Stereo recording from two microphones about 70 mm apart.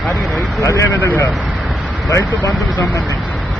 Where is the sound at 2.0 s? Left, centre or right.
Left.